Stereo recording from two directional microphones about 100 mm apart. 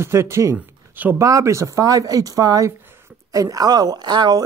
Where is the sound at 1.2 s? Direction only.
30° right (ahead or behind).